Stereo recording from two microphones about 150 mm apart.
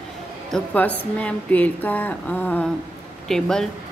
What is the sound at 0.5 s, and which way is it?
Speech, 10° left (ahead or behind).